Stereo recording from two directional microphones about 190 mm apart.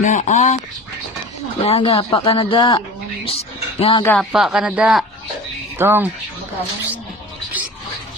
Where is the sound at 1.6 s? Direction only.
30° left (ahead or behind).